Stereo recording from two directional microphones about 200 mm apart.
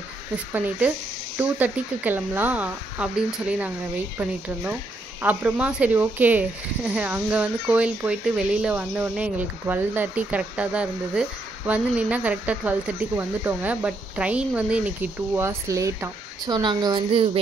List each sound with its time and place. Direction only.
0.5 s speech: 5° right (ahead or behind)
5.2 s speech: 10° right (ahead or behind); by 17.4 s 25° right (ahead or behind)